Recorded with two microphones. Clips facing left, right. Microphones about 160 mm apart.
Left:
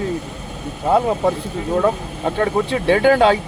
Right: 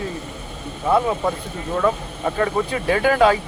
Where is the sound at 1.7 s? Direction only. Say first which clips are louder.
Left 2 dB; 35° left (ahead or behind).